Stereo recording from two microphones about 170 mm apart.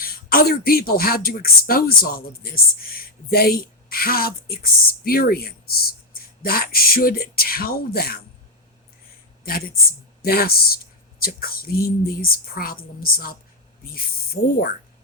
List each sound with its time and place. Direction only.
0.0 s speech: 60° left (ahead or behind)
9.4 s speech: 60° left (ahead or behind)
14.4 s speech: 60° left (ahead or behind)